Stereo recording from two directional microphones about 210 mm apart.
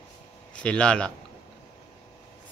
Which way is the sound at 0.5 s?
5° left (ahead or behind).